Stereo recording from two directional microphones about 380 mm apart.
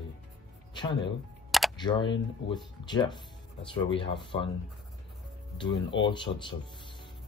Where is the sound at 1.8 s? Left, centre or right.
Centre.